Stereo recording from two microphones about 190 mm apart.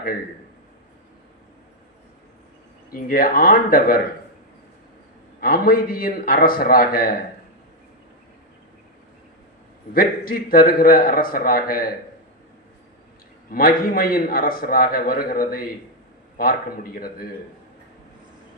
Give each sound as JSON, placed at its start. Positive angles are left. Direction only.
{"t": 2.9, "sound": "a man's voice", "side_deg": 50}
{"t": 5.4, "sound": "a man's voice", "side_deg": 50}
{"t": 9.9, "sound": "a man's voice", "side_deg": 50}
{"t": 13.5, "sound": "a man's voice", "side_deg": 50}